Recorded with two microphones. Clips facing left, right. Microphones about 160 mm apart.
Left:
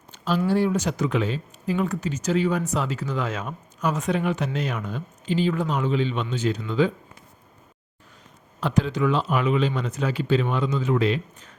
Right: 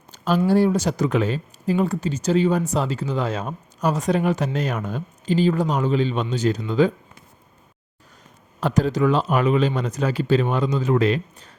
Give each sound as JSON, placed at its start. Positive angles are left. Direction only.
{"t": 0.1, "sound": "speech", "side_deg": -40}
{"t": 8.6, "sound": "speech", "side_deg": -40}